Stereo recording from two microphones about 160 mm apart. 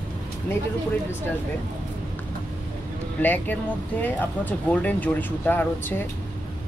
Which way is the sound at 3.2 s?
10° left (ahead or behind).